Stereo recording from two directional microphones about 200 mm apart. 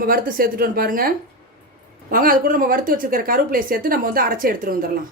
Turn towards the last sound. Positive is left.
turn(degrees=-45)  # may be behind; listen again after turning